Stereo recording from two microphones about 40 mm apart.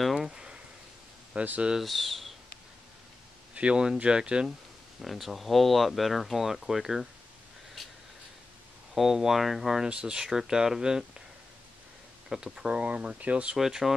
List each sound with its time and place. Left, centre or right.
0.0 s a sound: centre
0.3 s a sound: right
1.3 s speech: right
1.8 s speech: centre
3.5 s speech: right
5.0 s speech: centre
8.9 s speech: centre
9.8 s speech: right
12.5 s speech: right
13.6 s speech: centre